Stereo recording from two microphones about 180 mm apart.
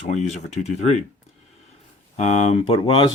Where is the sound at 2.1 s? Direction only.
40° left (ahead or behind).